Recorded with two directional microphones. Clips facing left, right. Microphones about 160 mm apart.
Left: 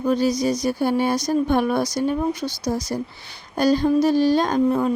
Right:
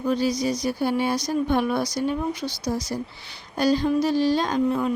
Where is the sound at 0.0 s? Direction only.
45° left (ahead or behind).